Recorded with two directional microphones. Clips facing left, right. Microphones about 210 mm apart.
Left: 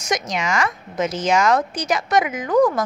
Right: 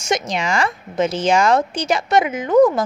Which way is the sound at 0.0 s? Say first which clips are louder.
Right 2 dB; 30° right (ahead or behind).